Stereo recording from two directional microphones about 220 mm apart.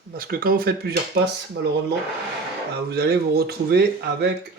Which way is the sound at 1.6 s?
55° right (ahead or behind).